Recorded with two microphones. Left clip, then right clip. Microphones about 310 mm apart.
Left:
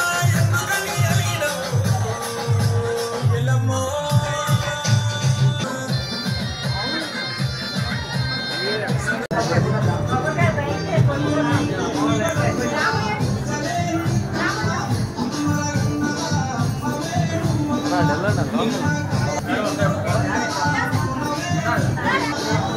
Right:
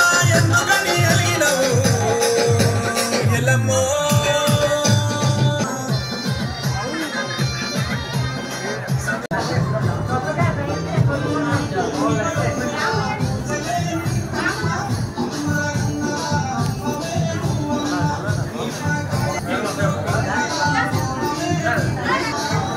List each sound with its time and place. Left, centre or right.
0.0 s music: right
4.1 s music: right